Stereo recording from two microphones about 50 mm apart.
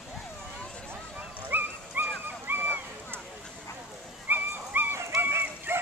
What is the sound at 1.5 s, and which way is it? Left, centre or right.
Dog, right.